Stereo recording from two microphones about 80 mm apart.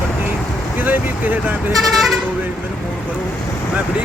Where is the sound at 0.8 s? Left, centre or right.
Right.